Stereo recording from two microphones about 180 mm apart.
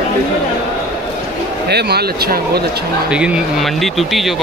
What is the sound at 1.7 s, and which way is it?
Speech, 60° right (ahead or behind).